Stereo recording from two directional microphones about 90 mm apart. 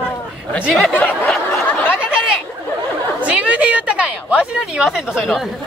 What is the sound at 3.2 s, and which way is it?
A woman's voice, 15° right (ahead or behind).